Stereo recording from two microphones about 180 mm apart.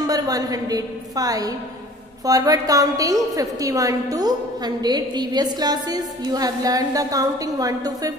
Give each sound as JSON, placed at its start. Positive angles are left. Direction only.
{"t": 0.0, "sound": "a woman's voice", "side_deg": -20}